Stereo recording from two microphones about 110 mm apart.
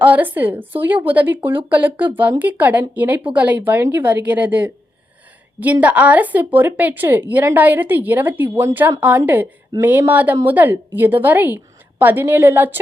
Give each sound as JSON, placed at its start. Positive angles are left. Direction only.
{"t": 0.0, "sound": "a woman's voice", "side_deg": -15}